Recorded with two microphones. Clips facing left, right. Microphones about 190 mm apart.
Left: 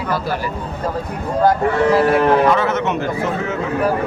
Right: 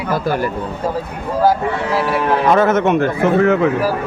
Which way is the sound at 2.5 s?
50° right (ahead or behind).